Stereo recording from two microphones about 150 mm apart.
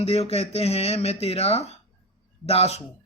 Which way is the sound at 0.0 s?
40° left (ahead or behind).